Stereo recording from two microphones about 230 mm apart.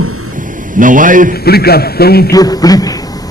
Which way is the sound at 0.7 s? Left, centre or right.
Right.